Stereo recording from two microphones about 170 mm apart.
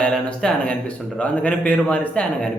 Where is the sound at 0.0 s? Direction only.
5° left (ahead or behind).